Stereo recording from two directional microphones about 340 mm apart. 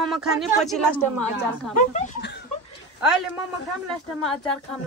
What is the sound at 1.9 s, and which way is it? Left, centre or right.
Speech, left.